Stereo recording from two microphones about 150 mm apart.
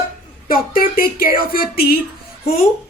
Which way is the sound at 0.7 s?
75° left (ahead or behind).